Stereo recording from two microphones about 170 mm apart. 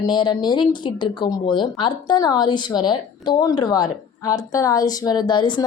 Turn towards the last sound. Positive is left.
turn(degrees=25)  # may be behind; listen again after turning